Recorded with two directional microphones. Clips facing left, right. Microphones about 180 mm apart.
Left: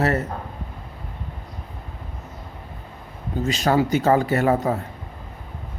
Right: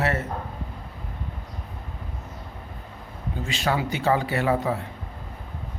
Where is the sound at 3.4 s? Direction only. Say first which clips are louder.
Left 6 dB; 40° left (ahead or behind).